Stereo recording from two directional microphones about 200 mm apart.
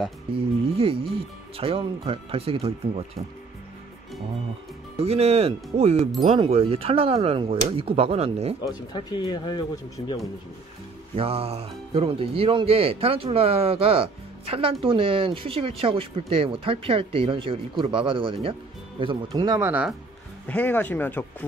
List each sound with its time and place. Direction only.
0.4 s speech: 25° right (ahead or behind)
4.9 s speech: 30° right (ahead or behind)
8.6 s speech: 20° left (ahead or behind)
11.1 s speech: 30° right (ahead or behind); by 19.9 s 10° right (ahead or behind)
20.4 s speech: 10° left (ahead or behind)